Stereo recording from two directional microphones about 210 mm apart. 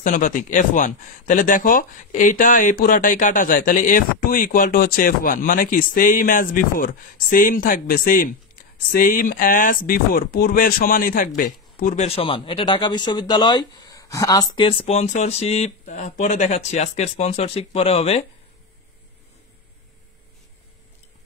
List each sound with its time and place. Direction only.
0.0 s speech: 35° left (ahead or behind)